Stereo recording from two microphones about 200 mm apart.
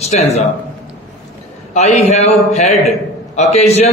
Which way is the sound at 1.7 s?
35° left (ahead or behind).